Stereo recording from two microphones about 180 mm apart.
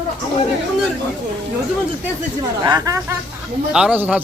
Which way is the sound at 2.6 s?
20° right (ahead or behind).